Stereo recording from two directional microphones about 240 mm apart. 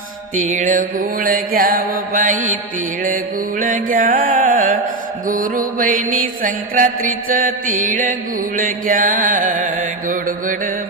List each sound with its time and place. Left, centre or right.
0.3 s mantra: right
3.6 s music: right
5.3 s mantra: right